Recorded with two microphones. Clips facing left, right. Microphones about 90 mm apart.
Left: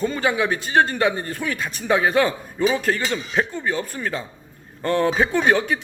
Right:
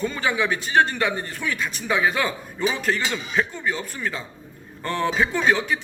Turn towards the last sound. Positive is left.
turn(degrees=50)  # may be behind; listen again after turning